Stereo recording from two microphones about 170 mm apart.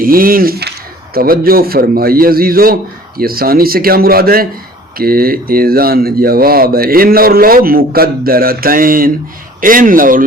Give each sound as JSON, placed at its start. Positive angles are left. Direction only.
{"t": 0.0, "sound": "a man's voice", "side_deg": -55}